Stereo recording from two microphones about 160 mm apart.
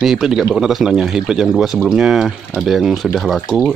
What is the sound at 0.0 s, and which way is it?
Speech, centre (ahead or behind).